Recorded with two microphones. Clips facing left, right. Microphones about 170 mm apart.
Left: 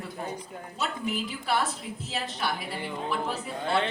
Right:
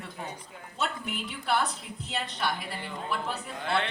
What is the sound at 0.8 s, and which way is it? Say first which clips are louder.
Speech: left 2 dB; centre (ahead or behind).